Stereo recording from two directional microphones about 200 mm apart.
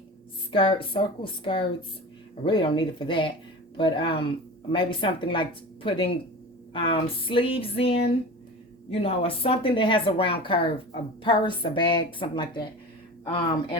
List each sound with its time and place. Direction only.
0.5 s a woman's voice: 25° left (ahead or behind)